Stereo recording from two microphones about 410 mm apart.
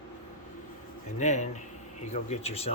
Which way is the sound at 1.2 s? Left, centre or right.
Centre.